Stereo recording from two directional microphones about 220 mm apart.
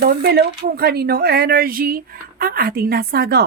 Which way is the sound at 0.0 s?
45° right (ahead or behind).